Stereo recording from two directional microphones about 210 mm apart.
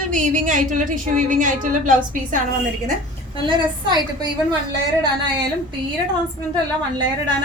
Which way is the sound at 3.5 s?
20° right (ahead or behind).